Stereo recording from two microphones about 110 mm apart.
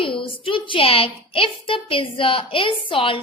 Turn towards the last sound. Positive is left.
turn(degrees=50)  # may be behind; listen again after turning